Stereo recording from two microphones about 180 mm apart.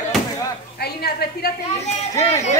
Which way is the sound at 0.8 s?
60° left (ahead or behind).